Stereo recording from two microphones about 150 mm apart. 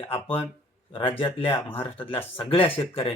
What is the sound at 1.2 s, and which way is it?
Speech, 35° left (ahead or behind).